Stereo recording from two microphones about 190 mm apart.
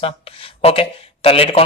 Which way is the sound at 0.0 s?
30° left (ahead or behind).